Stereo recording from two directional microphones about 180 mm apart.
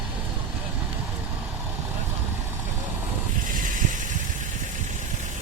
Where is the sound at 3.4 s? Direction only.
45° right (ahead or behind).